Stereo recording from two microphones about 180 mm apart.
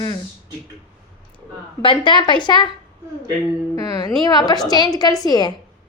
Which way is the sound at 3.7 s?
20° left (ahead or behind).